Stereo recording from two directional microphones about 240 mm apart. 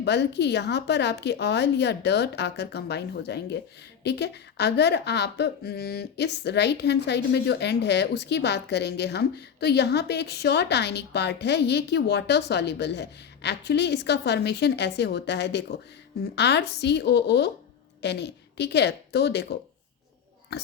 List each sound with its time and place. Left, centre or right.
0.0 s speech: left